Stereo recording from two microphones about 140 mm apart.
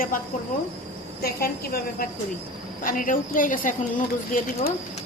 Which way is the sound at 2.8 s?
75° left (ahead or behind).